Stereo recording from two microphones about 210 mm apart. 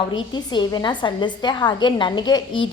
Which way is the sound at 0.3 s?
20° left (ahead or behind).